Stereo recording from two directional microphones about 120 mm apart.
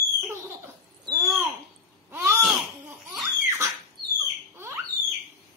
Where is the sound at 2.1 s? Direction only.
20° right (ahead or behind).